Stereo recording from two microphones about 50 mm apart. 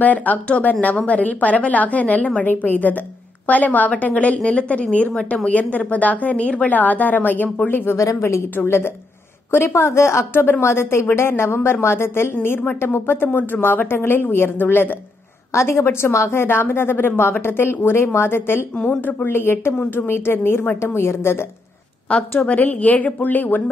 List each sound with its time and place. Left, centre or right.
0.0 s a woman's voice: left
7.7 s a woman's voice: left
8.0 s a woman's voice: left
8.6 s a woman's voice: left
10.3 s a woman's voice: left
10.6 s a woman's voice: left
12.4 s a woman's voice: left
15.5 s a woman's voice: left
16.3 s a woman's voice: left
22.1 s speech: left
22.5 s a woman's voice: left